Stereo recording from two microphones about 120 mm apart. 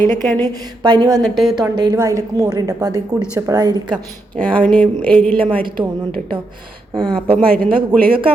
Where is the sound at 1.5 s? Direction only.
35° right (ahead or behind).